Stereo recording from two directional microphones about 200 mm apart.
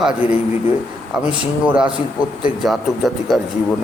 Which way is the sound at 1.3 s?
5° right (ahead or behind).